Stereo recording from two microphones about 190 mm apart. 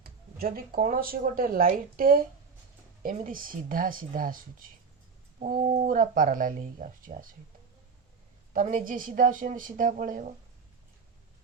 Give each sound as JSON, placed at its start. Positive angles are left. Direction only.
{"t": 0.0, "sound": "speech", "side_deg": -50}
{"t": 5.4, "sound": "speech", "side_deg": -45}
{"t": 8.5, "sound": "speech", "side_deg": -45}